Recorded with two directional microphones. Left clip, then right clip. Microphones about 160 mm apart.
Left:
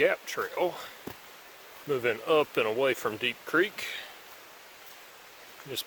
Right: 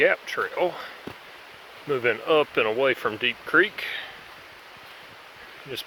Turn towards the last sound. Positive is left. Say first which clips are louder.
# right 2 dB
turn(degrees=15)  # may be behind; listen again after turning